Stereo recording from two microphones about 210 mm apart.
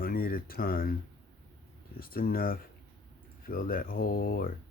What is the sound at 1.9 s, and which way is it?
Speech, 45° left (ahead or behind).